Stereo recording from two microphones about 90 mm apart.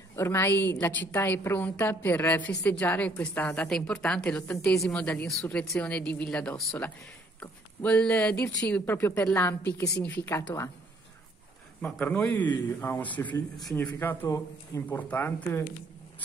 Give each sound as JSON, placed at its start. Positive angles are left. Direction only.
{"t": 0.1, "sound": "a man's voice", "side_deg": 25}
{"t": 11.8, "sound": "a man's voice", "side_deg": 15}